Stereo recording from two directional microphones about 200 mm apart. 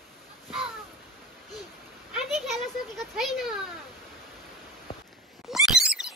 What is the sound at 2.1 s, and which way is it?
Children playing, centre (ahead or behind).